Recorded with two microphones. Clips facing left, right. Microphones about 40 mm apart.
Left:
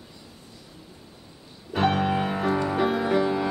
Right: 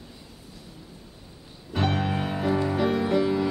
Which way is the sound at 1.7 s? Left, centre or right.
Centre.